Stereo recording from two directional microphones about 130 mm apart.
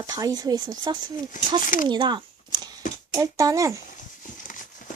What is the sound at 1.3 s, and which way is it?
Speech, 80° left.